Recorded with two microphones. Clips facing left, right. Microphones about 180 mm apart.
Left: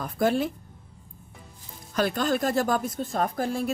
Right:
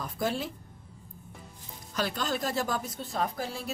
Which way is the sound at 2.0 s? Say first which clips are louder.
Left 6 dB; 50° left (ahead or behind).